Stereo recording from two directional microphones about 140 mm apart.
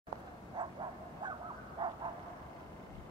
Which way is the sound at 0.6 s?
30° right (ahead or behind).